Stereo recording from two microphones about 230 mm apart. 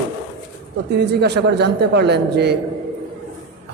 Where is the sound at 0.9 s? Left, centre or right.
Right.